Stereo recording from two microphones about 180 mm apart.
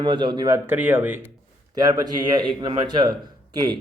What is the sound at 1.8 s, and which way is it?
A man's voice, 20° right (ahead or behind).